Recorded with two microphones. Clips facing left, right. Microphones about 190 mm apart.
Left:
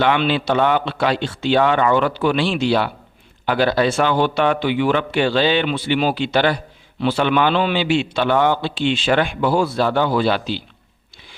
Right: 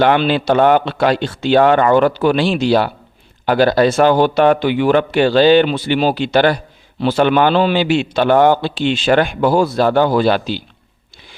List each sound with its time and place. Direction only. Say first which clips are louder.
0.0 s a man's voice: right 4 dB; 45° right (ahead or behind)